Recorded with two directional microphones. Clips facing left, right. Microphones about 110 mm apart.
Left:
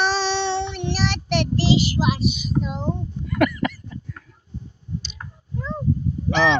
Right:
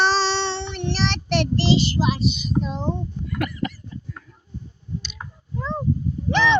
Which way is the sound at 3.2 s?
85° left.